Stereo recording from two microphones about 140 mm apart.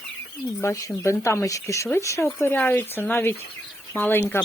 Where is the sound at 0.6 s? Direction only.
20° left (ahead or behind).